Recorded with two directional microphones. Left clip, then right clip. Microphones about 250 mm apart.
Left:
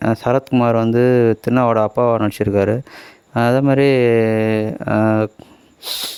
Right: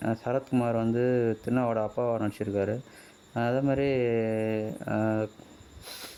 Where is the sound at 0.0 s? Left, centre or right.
Left.